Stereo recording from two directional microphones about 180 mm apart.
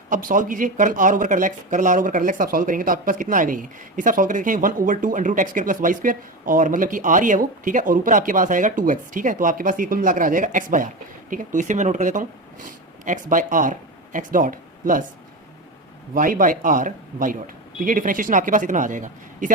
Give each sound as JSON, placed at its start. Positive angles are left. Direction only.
{"t": 0.1, "sound": "speech", "side_deg": -50}
{"t": 16.1, "sound": "speech", "side_deg": -50}